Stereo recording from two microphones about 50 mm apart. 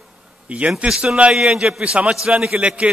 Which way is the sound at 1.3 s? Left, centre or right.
Centre.